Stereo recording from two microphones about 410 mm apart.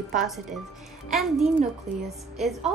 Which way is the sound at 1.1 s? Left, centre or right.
Centre.